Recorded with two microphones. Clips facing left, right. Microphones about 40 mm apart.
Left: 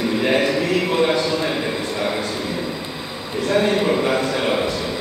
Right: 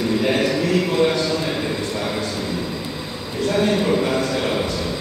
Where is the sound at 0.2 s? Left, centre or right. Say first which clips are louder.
Left 3 dB; centre.